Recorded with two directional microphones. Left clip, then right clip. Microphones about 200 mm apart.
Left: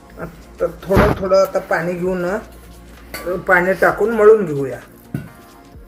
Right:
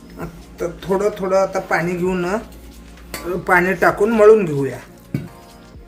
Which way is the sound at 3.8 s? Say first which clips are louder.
Even; 90° right.